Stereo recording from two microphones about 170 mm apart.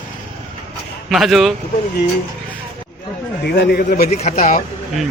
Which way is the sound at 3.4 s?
75° left (ahead or behind).